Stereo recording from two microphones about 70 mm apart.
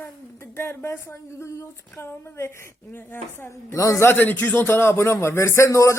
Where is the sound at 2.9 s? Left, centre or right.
Left.